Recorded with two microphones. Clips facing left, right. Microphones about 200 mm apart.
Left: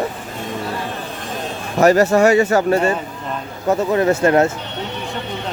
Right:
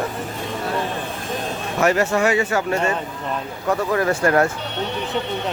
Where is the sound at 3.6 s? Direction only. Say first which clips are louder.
Left 4 dB; 25° left (ahead or behind).